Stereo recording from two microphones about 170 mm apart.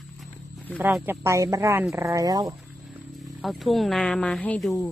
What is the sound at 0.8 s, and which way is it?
Speech, 10° right (ahead or behind).